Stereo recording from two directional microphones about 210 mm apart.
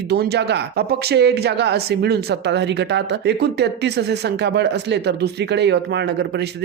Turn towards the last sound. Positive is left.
turn(degrees=-55)  # may be behind; listen again after turning